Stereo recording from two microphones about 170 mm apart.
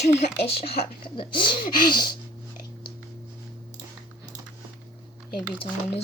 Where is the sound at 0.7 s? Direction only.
30° left (ahead or behind).